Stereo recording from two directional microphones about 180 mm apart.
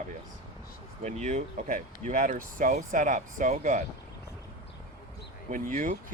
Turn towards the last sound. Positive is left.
turn(degrees=-45)  # may be behind; listen again after turning